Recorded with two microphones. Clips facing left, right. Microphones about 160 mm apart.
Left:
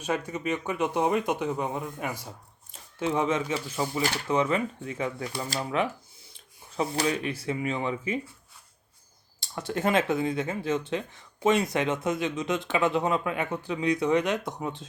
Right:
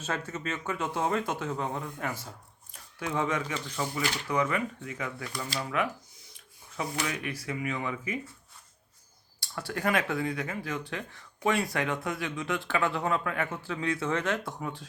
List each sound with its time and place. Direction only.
0.0 s speech: 15° left (ahead or behind)
2.7 s a sound: 25° left (ahead or behind)
3.8 s speech: 30° left (ahead or behind)
9.4 s speech: 20° left (ahead or behind)